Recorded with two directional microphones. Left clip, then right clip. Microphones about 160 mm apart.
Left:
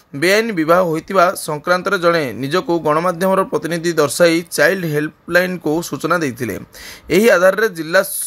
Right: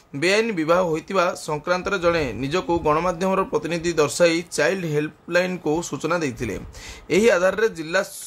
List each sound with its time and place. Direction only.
0.2 s speech: 25° left (ahead or behind)